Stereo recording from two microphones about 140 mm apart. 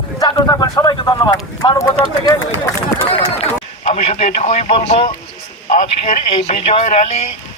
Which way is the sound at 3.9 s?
50° left (ahead or behind).